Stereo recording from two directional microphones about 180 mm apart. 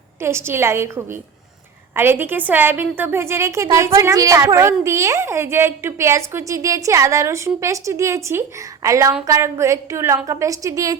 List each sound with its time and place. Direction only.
0.2 s a woman's voice: 15° right (ahead or behind)